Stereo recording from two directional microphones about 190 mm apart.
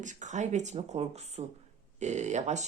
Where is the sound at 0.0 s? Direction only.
40° right (ahead or behind).